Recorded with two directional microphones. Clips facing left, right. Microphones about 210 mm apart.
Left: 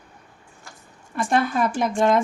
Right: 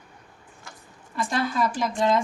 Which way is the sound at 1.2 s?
55° left (ahead or behind).